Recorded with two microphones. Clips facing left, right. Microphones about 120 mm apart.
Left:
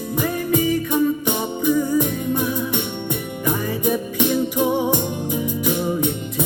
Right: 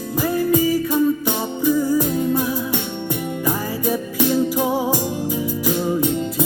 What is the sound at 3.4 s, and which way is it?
Music, 15° left (ahead or behind).